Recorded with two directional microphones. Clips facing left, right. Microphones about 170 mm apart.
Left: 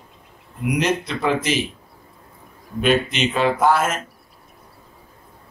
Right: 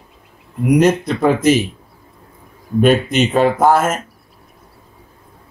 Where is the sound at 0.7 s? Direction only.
45° right (ahead or behind).